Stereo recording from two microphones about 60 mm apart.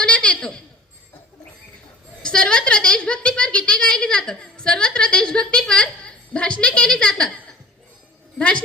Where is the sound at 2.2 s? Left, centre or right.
Centre.